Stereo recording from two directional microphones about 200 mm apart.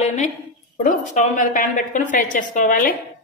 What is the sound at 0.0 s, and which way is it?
A woman's voice, 35° left (ahead or behind).